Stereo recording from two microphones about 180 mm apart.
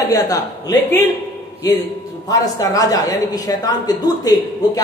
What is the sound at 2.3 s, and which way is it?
A woman's voice, 20° left (ahead or behind).